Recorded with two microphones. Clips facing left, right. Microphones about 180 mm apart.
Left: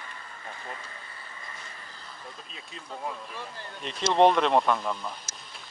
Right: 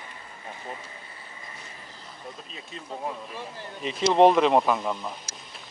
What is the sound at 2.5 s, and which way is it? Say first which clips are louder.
Speech: right 3 dB; centre (ahead or behind).